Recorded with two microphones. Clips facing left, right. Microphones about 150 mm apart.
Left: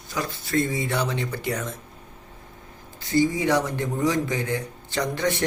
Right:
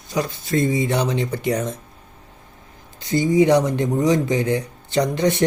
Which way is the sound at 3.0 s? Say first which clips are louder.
Right 5 dB; 20° right (ahead or behind).